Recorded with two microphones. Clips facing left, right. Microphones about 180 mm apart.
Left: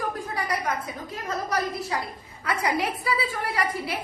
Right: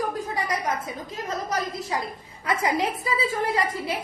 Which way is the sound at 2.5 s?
25° right (ahead or behind).